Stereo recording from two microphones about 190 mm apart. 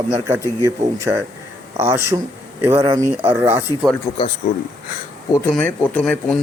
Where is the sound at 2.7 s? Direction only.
25° right (ahead or behind).